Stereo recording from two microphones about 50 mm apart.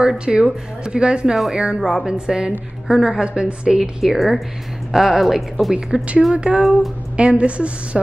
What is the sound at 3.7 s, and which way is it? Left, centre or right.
A woman's voice, centre.